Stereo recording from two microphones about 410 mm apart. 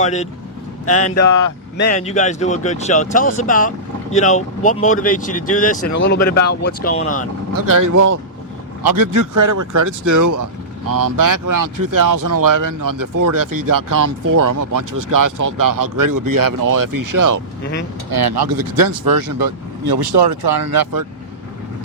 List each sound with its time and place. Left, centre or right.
0.0 s speech: centre
0.9 s speech: left
1.9 s speech: centre
7.5 s speech: right
18.1 s speech: right